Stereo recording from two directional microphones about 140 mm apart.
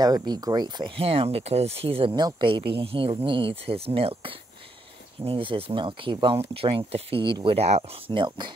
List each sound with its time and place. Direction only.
0.0 s speech: 30° right (ahead or behind); by 8.2 s 50° right (ahead or behind)